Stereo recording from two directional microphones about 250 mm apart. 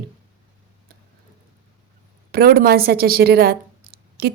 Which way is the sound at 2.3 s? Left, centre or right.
Right.